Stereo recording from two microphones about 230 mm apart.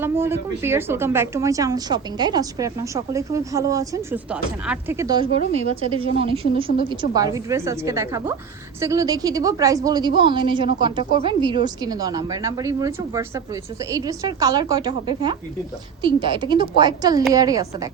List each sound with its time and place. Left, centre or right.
0.0 s a woman's voice: centre